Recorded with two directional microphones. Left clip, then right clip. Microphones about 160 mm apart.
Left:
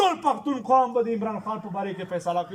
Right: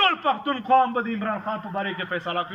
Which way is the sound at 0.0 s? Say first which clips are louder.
Right 1 dB; 45° left (ahead or behind).